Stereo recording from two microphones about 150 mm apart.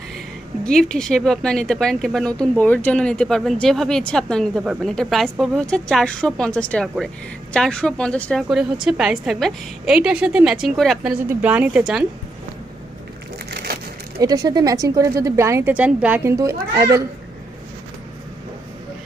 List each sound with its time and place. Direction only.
0.6 s speech: 5° left (ahead or behind)
13.5 s crushing: 90° right
14.2 s speech: 25° right (ahead or behind)